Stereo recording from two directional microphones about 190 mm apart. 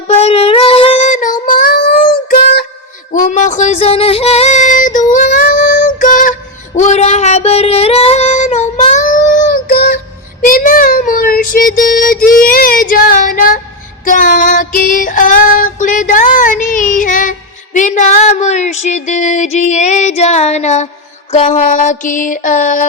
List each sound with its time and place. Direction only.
0.1 s child singing: 30° left (ahead or behind); by 2.6 s 50° left (ahead or behind)
3.1 s a sound: 40° left (ahead or behind)
6.8 s female singing: 35° left (ahead or behind); by 10.0 s 50° left (ahead or behind)
10.4 s child singing: 45° left (ahead or behind)
17.7 s female singing: 40° left (ahead or behind)
21.3 s a sound: 40° left (ahead or behind)